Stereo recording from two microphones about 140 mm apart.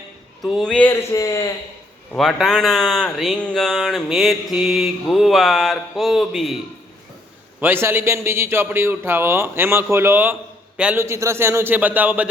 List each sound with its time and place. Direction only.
0.4 s speech: centre (ahead or behind)
1.1 s speech: 25° left (ahead or behind)
2.1 s speech: centre (ahead or behind)
7.6 s a man's voice: 15° right (ahead or behind)
11.0 s a man's voice: 20° right (ahead or behind)